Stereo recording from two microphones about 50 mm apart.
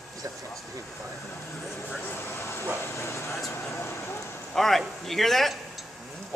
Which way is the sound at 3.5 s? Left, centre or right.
Left.